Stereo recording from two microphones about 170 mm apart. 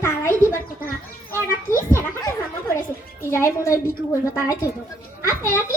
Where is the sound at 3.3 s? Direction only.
15° left (ahead or behind).